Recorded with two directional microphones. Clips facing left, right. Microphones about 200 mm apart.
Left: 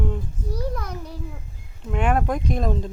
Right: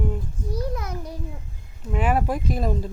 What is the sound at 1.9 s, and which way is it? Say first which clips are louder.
Speech: left 1 dB; 5° right (ahead or behind).